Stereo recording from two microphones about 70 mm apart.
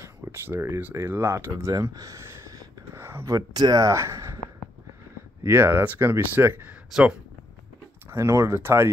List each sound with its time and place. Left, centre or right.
0.0 s speech: right
1.7 s a sound: right
3.3 s speech: right
3.8 s speech: right
5.4 s speech: right
6.9 s speech: centre
8.1 s speech: right